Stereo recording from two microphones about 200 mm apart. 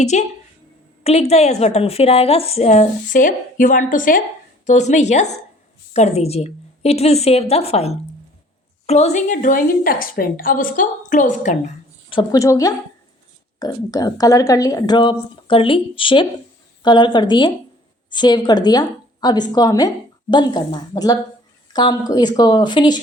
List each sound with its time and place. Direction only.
0.0 s a woman's voice: 35° left (ahead or behind)
12.1 s a woman's voice: 15° left (ahead or behind)